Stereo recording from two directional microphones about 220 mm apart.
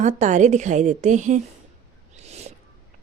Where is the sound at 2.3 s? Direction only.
30° right (ahead or behind).